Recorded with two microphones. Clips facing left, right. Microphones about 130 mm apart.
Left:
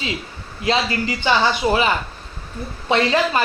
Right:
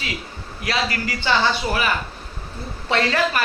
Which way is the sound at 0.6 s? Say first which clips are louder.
Left 4 dB; 25° left (ahead or behind).